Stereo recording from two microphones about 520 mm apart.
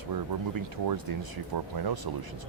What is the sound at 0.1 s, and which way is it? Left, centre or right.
Speech, right.